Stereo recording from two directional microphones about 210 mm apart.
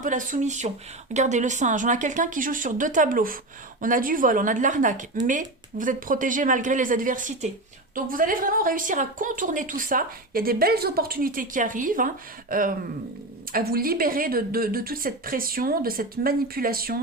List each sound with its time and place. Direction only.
0.0 s a woman's voice: 40° right (ahead or behind)